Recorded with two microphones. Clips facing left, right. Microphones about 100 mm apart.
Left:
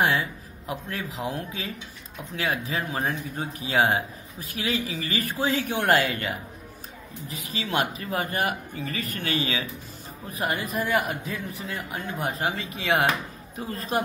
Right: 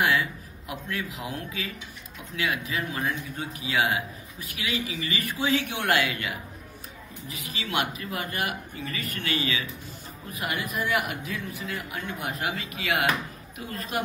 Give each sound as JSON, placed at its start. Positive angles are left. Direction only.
{"t": 0.0, "sound": "a man's voice", "side_deg": 30}